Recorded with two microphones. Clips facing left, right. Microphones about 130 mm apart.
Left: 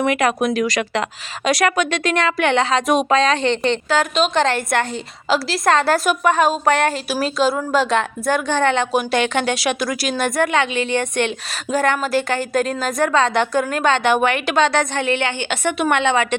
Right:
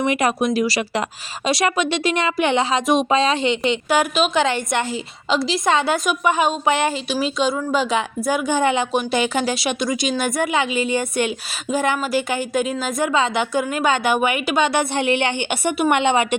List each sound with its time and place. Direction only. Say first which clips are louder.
0.5 s speech: left 1 dB; 35° right (ahead or behind)
2.2 s a woman's voice: left 2 dB; 10° right (ahead or behind)
2.8 s a woman's voice: left 1 dB; centre (ahead or behind)